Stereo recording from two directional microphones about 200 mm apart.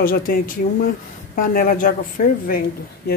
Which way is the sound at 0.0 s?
45° left (ahead or behind).